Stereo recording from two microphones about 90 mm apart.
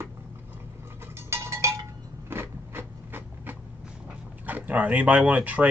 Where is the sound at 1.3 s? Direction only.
30° right (ahead or behind).